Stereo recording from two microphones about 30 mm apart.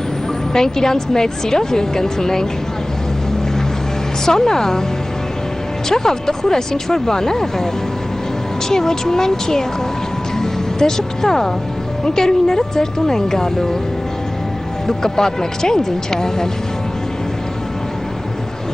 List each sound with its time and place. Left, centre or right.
0.5 s a woman's voice: centre
4.3 s a woman's voice: centre
5.9 s a woman's voice: centre
8.6 s a woman's voice: centre
14.9 s a woman's voice: centre